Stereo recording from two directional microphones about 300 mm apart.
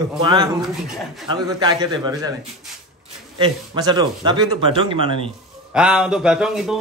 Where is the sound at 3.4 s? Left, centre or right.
Centre.